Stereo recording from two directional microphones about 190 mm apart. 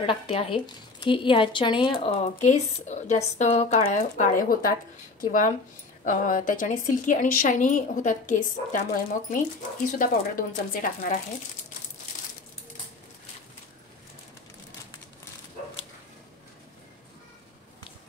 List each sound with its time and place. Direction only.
0.0 s a woman's voice: 30° left (ahead or behind); by 11.1 s 45° left (ahead or behind)